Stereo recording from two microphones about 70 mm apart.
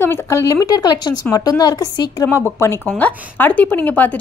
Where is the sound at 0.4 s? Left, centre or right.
Left.